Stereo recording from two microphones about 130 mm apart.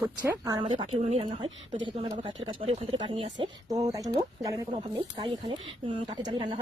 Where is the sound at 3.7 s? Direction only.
25° right (ahead or behind).